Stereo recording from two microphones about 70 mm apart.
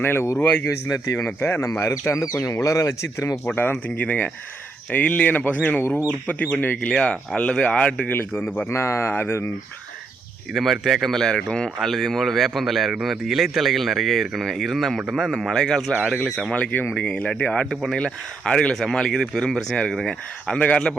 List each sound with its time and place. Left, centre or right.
0.0 s speech: left
0.9 s speech: left
1.4 s speech: left
1.8 s speech: left
3.5 s speech: left
8.5 s speech: left
10.5 s speech: centre
16.6 s speech: left